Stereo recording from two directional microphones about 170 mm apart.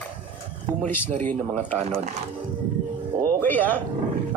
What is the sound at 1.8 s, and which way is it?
Speech, 40° right (ahead or behind).